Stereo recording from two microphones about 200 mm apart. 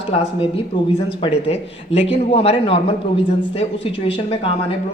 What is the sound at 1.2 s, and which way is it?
Speech, 30° left (ahead or behind).